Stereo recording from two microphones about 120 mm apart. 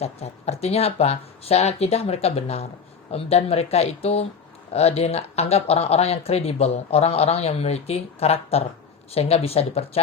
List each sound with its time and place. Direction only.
0.0 s speech: 60° left (ahead or behind)